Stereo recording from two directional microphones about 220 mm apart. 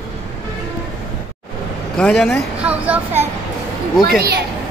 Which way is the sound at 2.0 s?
5° left (ahead or behind).